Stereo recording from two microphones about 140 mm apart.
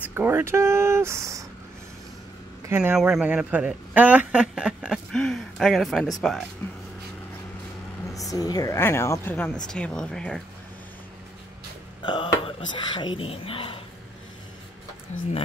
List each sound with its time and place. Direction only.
0.0 s speech: 15° right (ahead or behind)
2.7 s speech: 15° right (ahead or behind)
3.0 s speech: 5° right (ahead or behind)
6.6 s a woman's voice: 15° left (ahead or behind)
8.3 s a woman's voice: 25° left (ahead or behind); by 10.4 s 5° left (ahead or behind)
12.0 s speech: 35° left (ahead or behind)